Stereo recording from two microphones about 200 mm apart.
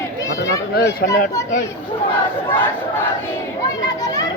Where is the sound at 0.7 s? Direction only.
55° left (ahead or behind).